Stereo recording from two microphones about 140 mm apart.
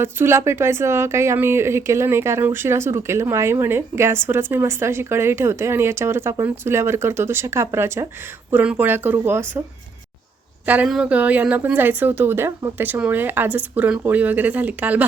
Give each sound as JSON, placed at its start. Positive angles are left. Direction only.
{"t": 0.0, "sound": "speech", "side_deg": -15}
{"t": 10.7, "sound": "speech", "side_deg": -5}